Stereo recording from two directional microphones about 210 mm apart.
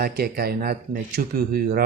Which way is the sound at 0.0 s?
45° right (ahead or behind).